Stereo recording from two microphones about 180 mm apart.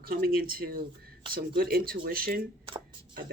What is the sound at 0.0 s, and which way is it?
Speech, 55° right (ahead or behind).